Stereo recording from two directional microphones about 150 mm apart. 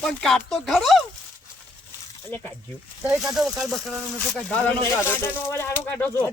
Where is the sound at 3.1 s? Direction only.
Centre (ahead or behind).